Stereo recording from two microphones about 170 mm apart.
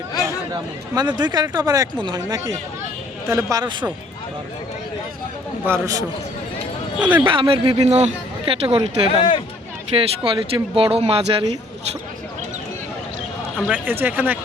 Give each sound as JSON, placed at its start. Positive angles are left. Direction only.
{"t": 0.2, "sound": "speech", "side_deg": -20}
{"t": 5.6, "sound": "speech", "side_deg": -15}
{"t": 7.3, "sound": "speech", "side_deg": -30}
{"t": 13.7, "sound": "speech", "side_deg": -10}